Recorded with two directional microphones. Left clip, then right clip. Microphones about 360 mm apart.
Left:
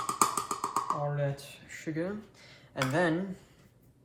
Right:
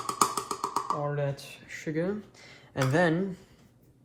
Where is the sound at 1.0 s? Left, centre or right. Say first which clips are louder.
Right 2 dB; centre.